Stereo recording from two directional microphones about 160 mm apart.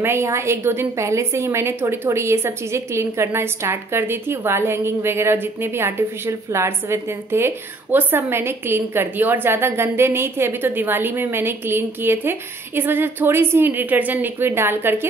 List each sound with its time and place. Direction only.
0.0 s a woman's voice: 15° right (ahead or behind)